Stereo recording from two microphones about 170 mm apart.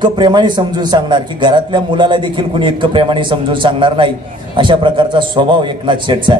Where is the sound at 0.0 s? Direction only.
25° right (ahead or behind).